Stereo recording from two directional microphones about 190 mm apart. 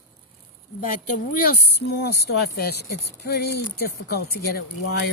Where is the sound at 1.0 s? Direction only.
45° left (ahead or behind).